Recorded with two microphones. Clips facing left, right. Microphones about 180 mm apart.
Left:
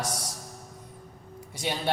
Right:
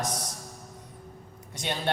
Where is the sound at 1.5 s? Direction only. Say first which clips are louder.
Left 1 dB; 5° left (ahead or behind).